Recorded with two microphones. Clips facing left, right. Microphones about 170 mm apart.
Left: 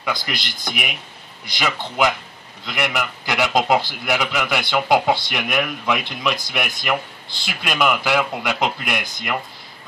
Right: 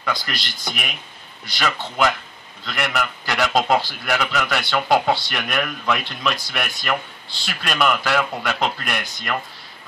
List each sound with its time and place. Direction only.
0.0 s a man's voice: 10° left (ahead or behind)